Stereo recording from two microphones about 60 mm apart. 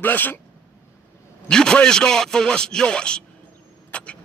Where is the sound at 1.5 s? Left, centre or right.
Centre.